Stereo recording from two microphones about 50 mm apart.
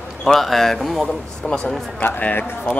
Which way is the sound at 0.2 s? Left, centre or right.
Centre.